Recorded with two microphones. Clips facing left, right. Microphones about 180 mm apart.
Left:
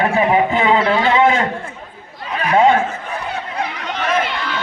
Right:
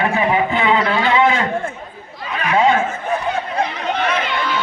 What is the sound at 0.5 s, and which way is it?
Speech, 40° left (ahead or behind).